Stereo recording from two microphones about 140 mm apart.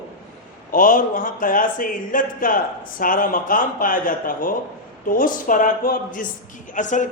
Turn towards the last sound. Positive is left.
turn(degrees=65)  # may be behind; listen again after turning